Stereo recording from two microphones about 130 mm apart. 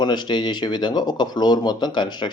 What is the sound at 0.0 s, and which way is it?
Speech, 35° left (ahead or behind).